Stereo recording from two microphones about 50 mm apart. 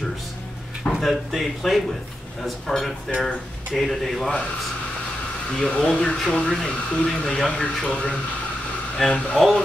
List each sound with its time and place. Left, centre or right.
0.9 s speech: centre
5.7 s speech: centre
7.6 s speech: left